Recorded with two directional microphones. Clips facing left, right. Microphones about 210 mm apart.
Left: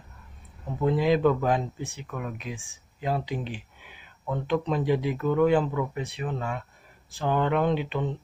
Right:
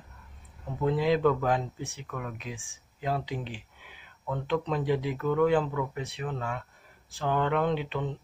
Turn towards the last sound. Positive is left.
turn(degrees=15)  # may be behind; listen again after turning